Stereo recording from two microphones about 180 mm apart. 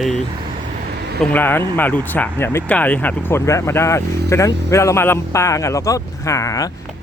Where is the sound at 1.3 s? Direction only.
10° left (ahead or behind).